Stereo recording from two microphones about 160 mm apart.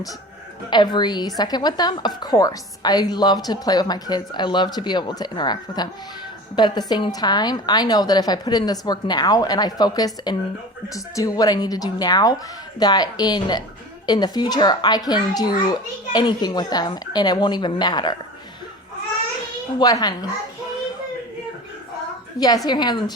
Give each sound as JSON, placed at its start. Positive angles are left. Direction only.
{"t": 0.7, "sound": "speech", "side_deg": 30}
{"t": 19.8, "sound": "speech", "side_deg": 25}
{"t": 22.4, "sound": "speech", "side_deg": 25}